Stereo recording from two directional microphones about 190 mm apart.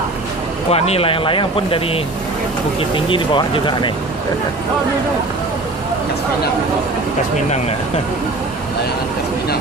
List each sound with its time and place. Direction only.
0.7 s speech: 30° left (ahead or behind)